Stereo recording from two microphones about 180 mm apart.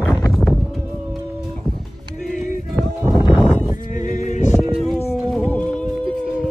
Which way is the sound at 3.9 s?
45° left (ahead or behind).